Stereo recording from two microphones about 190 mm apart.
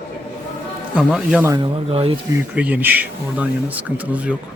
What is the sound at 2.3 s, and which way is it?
Speech, 10° right (ahead or behind).